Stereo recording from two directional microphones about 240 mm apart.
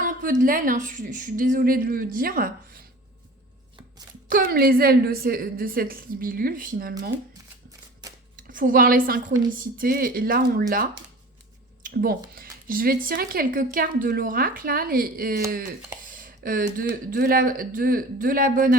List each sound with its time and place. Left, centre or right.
0.0 s speech: right
4.3 s speech: right
8.4 s speech: right